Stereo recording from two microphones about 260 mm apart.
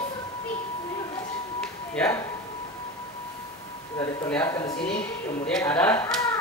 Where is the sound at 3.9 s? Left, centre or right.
Centre.